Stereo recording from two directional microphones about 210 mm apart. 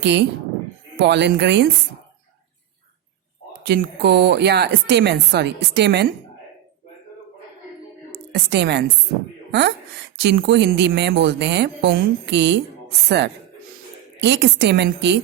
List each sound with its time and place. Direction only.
0.0 s a woman's voice: 55° right (ahead or behind)
3.7 s a woman's voice: 50° right (ahead or behind)
8.3 s a woman's voice: 55° right (ahead or behind)